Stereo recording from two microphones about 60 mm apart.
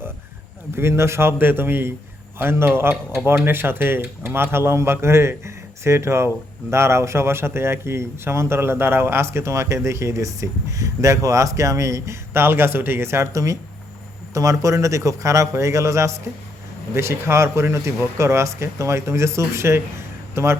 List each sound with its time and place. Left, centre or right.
0.8 s speech: right
12.3 s a man's voice: right
13.3 s a man's voice: right